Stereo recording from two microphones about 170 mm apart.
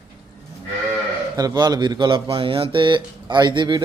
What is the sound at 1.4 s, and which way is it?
Speech, 25° right (ahead or behind).